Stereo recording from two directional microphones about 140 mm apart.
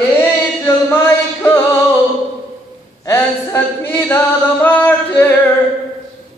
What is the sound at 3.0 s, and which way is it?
Chant, 20° left (ahead or behind).